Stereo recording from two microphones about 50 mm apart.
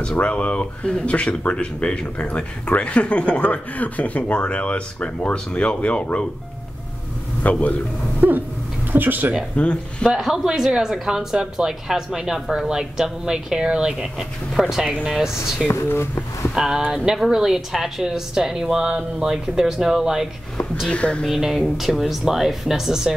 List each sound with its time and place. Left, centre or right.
0.0 s speech: left
7.4 s a man's voice: left
8.2 s speech: right
9.6 s speech: left
10.0 s a woman's voice: centre
20.9 s speech: left
21.3 s speech: centre